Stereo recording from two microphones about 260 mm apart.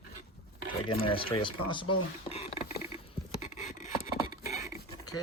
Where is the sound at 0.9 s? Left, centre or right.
Left.